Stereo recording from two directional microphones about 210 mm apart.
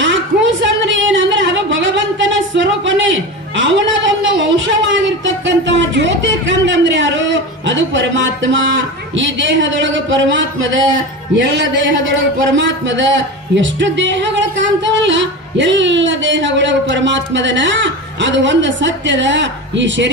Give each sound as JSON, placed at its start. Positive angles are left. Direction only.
{"t": 0.0, "sound": "a woman's voice", "side_deg": -60}